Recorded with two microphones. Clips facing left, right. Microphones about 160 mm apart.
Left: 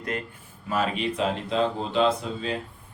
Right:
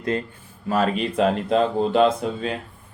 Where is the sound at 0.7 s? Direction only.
45° right (ahead or behind).